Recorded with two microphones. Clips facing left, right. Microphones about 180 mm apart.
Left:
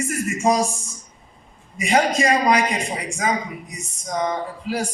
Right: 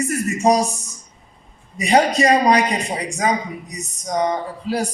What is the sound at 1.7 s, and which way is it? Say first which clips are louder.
A man's voice: right 3 dB; 35° right (ahead or behind).